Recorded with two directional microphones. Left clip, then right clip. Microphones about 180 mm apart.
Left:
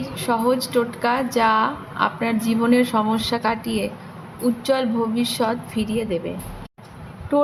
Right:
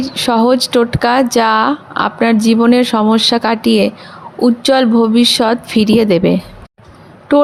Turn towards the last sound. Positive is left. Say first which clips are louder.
# right 9 dB
turn(degrees=-45)  # may be behind; listen again after turning